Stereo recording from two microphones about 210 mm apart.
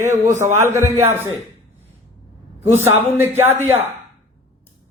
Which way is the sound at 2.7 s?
10° right (ahead or behind).